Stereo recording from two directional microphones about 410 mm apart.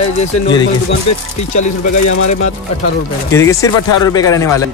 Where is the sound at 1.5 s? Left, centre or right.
Left.